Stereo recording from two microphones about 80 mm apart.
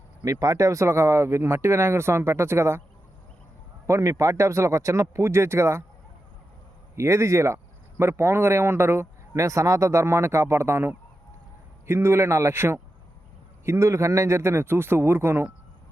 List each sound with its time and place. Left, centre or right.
0.3 s speech: right
3.8 s speech: right
6.9 s speech: right